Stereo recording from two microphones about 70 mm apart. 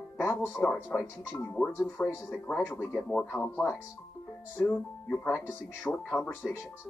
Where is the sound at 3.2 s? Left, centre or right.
Left.